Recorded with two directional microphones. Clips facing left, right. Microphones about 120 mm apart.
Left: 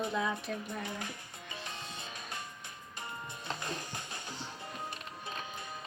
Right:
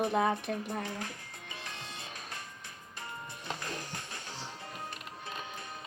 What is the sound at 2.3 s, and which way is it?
Music, 20° left (ahead or behind).